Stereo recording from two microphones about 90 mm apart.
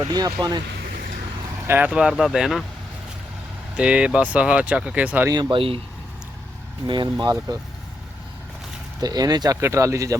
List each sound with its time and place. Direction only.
0.0 s speech: 50° right (ahead or behind)
1.6 s speech: 25° right (ahead or behind)
1.9 s speech: 5° right (ahead or behind)
3.8 s speech: 15° right (ahead or behind)
5.3 s speech: 50° right (ahead or behind)
5.5 s speech: 90° right
6.8 s speech: 60° right (ahead or behind); by 7.6 s 45° right (ahead or behind)
9.0 s speech: 45° right (ahead or behind)
9.6 s speech: 30° right (ahead or behind)